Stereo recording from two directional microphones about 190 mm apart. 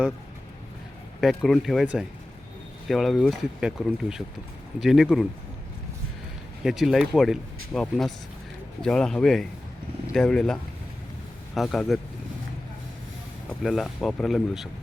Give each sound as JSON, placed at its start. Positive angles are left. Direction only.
{"t": 1.2, "sound": "speech", "side_deg": 0}
{"t": 6.6, "sound": "speech", "side_deg": 0}
{"t": 13.5, "sound": "speech", "side_deg": 0}